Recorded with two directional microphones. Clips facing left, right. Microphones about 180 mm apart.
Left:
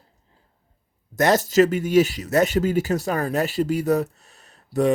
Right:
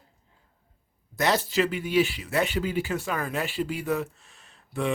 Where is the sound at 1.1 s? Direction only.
45° left (ahead or behind).